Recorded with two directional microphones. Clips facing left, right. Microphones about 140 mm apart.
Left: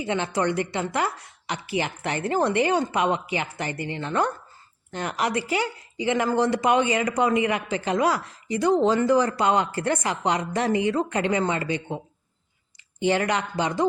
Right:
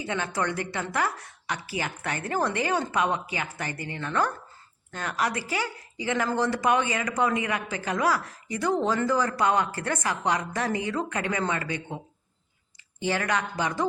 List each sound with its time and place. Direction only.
0.0 s speech: 20° left (ahead or behind)
13.1 s speech: 20° left (ahead or behind)